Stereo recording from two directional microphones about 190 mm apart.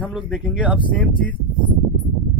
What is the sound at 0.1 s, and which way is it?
Speech, 5° right (ahead or behind).